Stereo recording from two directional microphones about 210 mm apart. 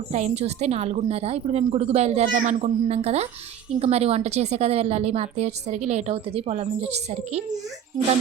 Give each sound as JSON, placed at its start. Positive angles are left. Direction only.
{"t": 0.1, "sound": "a woman's voice", "side_deg": -30}